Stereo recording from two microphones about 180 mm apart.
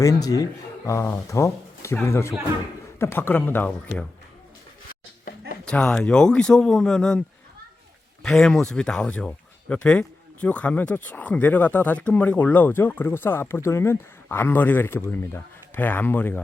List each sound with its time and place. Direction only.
0.0 s speech: 20° left (ahead or behind)
5.6 s speech: 5° left (ahead or behind)
8.2 s speech: 5° left (ahead or behind)